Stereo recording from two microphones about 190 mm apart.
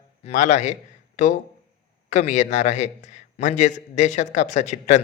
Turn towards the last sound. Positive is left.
turn(degrees=35)  # may be behind; listen again after turning